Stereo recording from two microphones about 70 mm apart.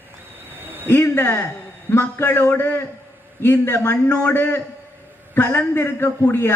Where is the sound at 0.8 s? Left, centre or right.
Left.